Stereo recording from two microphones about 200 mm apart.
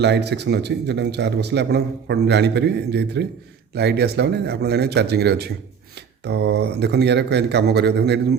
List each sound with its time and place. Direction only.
0.0 s a man's voice: 60° right (ahead or behind)